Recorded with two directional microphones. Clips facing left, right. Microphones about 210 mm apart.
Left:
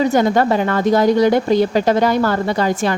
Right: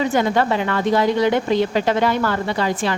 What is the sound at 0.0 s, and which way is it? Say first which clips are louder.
A woman's voice: left 4 dB; 40° left (ahead or behind).